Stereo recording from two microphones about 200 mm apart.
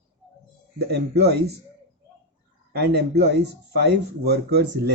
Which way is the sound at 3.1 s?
60° right (ahead or behind).